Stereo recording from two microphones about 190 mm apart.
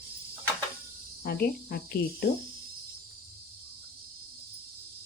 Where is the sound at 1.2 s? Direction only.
55° left (ahead or behind).